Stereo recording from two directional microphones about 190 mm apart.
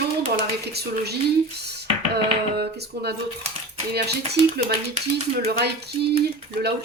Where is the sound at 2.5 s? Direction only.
60° right (ahead or behind).